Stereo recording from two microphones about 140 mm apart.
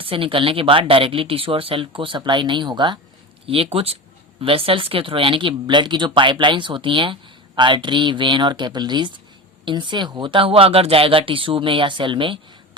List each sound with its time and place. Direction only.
0.0 s speech: 40° right (ahead or behind)